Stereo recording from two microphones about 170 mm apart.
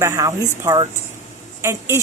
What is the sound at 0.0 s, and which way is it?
A woman's voice, 20° right (ahead or behind).